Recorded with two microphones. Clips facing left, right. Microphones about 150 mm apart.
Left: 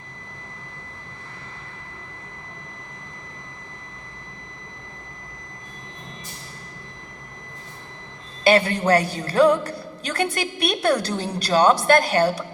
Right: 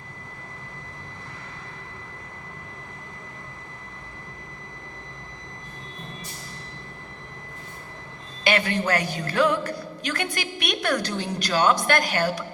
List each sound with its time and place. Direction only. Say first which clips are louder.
8.4 s a woman's voice: left 6 dB; 35° left (ahead or behind)